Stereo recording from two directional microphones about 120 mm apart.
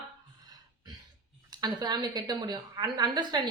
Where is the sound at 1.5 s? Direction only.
35° right (ahead or behind).